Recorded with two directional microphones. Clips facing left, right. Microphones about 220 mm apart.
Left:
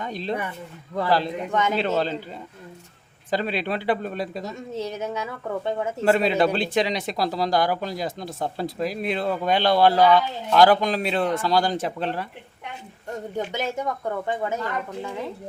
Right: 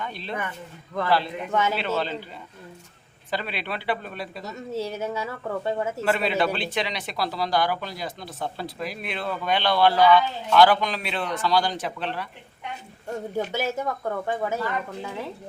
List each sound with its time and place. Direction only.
0.0 s speech: 40° left (ahead or behind)
1.5 s speech: 5° right (ahead or behind)
1.8 s speech: 45° left (ahead or behind)
3.2 s speech: 40° left (ahead or behind)
4.7 s speech: 10° right (ahead or behind)
6.1 s speech: 40° left (ahead or behind)
13.3 s speech: 5° right (ahead or behind)